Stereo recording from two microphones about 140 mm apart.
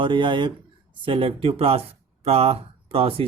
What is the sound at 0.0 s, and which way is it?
Speech, 35° right (ahead or behind).